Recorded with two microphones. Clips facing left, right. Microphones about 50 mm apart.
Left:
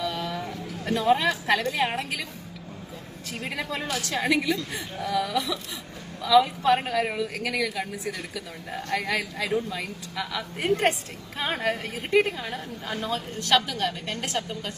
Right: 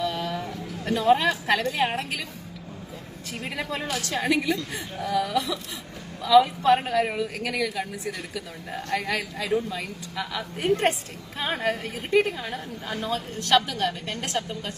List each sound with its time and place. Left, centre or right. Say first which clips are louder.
0.0 s a sound: right 2 dB; centre
0.4 s a sound: right 1 dB; centre
1.5 s a man's voice: right 1 dB; centre
3.6 s a woman's voice: right 1 dB; centre
13.6 s a woman's voice: right 3 dB; centre
13.8 s a man's voice: right 1 dB; centre